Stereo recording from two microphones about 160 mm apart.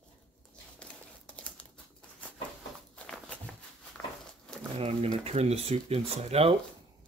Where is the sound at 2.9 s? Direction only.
5° left (ahead or behind).